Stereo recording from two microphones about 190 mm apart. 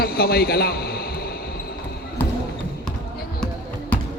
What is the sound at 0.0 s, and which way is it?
A man's voice, 55° left (ahead or behind).